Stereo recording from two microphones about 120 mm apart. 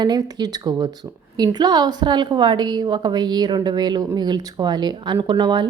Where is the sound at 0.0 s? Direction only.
35° right (ahead or behind).